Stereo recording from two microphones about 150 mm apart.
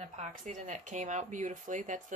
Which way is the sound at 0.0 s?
50° right (ahead or behind).